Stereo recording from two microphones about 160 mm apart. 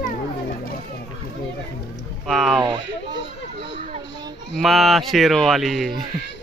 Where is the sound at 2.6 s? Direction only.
30° right (ahead or behind).